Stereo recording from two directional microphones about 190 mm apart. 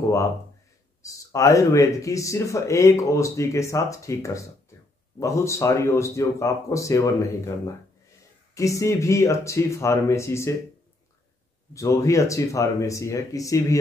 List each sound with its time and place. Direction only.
1.0 s speech: 15° left (ahead or behind)
11.7 s speech: 15° left (ahead or behind)